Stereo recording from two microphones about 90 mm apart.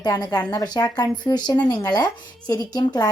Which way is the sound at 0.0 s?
50° left (ahead or behind).